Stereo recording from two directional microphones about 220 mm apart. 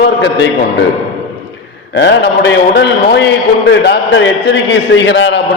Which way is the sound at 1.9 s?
50° left (ahead or behind).